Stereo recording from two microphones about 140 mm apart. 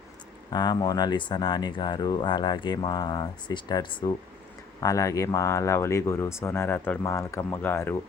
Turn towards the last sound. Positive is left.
turn(degrees=15)  # may be behind; listen again after turning